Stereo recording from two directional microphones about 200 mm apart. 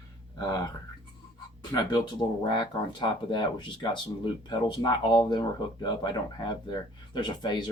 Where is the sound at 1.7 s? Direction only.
20° left (ahead or behind).